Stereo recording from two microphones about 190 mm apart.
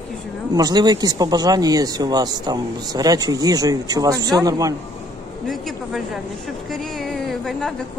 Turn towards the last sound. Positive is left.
turn(degrees=0)  # may be behind; listen again after turning